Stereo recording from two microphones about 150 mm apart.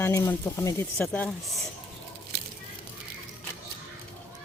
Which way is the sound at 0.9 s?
10° left (ahead or behind).